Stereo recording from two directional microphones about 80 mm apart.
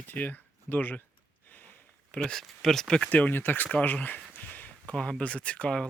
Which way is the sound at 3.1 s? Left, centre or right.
Left.